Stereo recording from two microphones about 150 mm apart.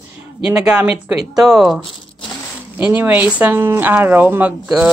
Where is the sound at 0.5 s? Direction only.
5° right (ahead or behind).